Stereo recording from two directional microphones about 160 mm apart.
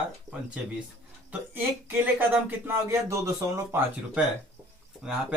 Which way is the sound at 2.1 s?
10° right (ahead or behind).